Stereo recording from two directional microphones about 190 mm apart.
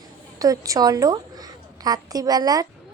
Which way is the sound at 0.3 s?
20° right (ahead or behind).